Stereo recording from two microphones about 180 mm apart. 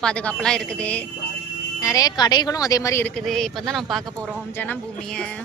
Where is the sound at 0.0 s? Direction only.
5° left (ahead or behind).